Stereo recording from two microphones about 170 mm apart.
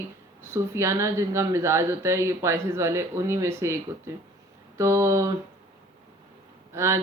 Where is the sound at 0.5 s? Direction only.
15° right (ahead or behind).